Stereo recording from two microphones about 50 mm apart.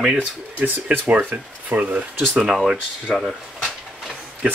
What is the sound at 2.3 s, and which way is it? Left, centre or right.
Speech, centre.